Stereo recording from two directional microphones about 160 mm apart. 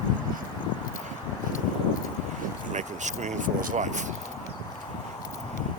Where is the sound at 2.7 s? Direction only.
50° right (ahead or behind).